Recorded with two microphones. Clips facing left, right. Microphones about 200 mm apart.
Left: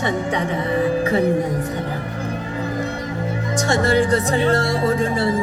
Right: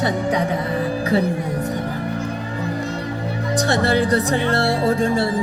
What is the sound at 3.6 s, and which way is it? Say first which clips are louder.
Speech: left 1 dB; 35° right (ahead or behind).